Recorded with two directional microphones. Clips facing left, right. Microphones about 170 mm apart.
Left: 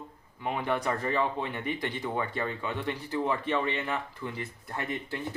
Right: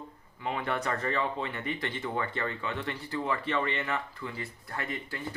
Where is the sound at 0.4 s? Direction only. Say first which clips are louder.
Left 2 dB; 15° left (ahead or behind).